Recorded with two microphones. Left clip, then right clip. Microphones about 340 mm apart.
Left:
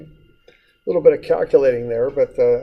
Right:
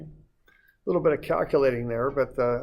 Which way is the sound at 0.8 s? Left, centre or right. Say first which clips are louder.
Left 9 dB; right.